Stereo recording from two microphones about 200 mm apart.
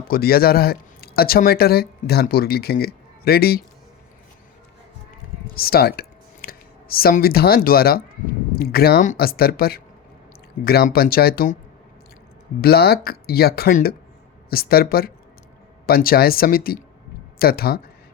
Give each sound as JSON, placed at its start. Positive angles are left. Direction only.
{"t": 0.1, "sound": "speech", "side_deg": 50}
{"t": 5.5, "sound": "speech", "side_deg": 50}
{"t": 12.6, "sound": "speech", "side_deg": 50}